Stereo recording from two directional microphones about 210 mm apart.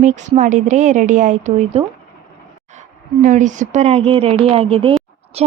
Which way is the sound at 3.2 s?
35° right (ahead or behind).